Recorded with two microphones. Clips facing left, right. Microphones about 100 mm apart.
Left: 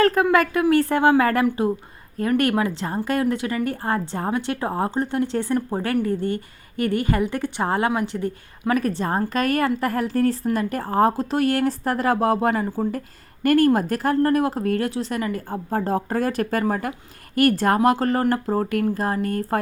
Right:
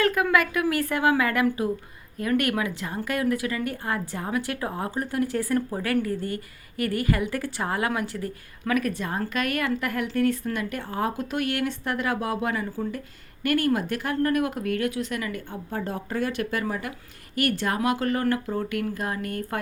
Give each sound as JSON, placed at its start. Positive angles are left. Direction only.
{"t": 0.0, "sound": "a woman's voice", "side_deg": 30}